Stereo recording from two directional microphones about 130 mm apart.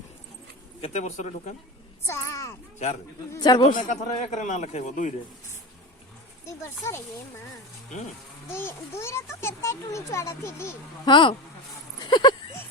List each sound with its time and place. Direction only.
0.8 s speech: 60° left (ahead or behind)
2.0 s a child's voice: 20° left (ahead or behind)
2.7 s speech: 65° left (ahead or behind)
3.3 s speech: 30° left (ahead or behind)
3.8 s a man's voice: 65° left (ahead or behind)
6.4 s a child's voice: 25° left (ahead or behind)
8.4 s a child's voice: 20° left (ahead or behind)
11.0 s speech: 35° left (ahead or behind)